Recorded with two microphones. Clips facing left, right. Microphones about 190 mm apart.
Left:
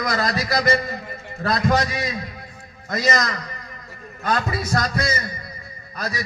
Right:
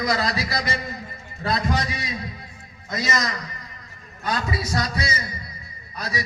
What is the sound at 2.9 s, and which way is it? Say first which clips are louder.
A man's voice: left 4 dB; 55° left (ahead or behind).